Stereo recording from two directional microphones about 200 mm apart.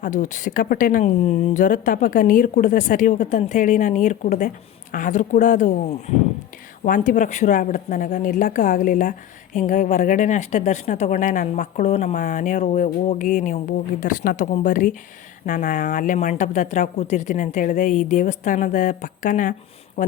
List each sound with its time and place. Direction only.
0.0 s speech: 40° left (ahead or behind)